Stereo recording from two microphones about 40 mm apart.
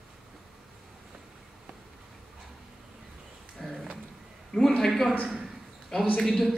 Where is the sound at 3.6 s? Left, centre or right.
Centre.